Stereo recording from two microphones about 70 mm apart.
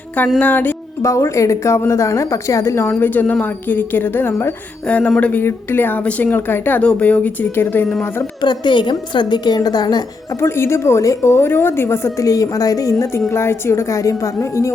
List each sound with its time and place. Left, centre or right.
0.3 s speech: left
1.0 s a woman's voice: left
3.0 s speech: left
4.9 s speech: centre
5.4 s speech: left
8.4 s a woman's voice: left
10.4 s a woman's voice: left